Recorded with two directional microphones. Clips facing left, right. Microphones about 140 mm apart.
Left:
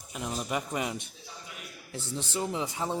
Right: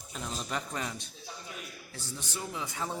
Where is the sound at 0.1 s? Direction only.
15° left (ahead or behind).